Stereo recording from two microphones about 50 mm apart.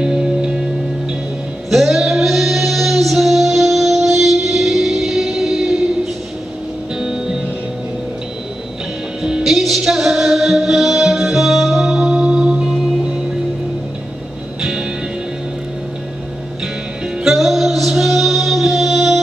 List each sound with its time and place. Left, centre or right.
0.0 s music: centre
1.7 s music: centre
7.0 s music: centre
9.2 s music: centre
9.5 s music: centre
14.6 s music: centre
17.2 s music: centre